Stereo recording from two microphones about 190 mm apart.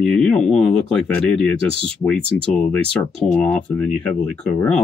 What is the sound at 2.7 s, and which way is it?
Speech, 5° left (ahead or behind).